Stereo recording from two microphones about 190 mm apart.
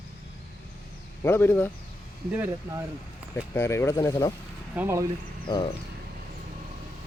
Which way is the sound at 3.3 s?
15° left (ahead or behind).